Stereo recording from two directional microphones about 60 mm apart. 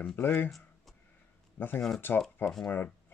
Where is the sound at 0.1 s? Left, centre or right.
Left.